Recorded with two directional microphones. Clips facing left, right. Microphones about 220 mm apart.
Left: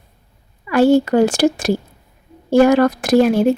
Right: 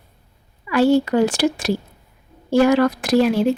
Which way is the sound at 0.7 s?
45° left (ahead or behind).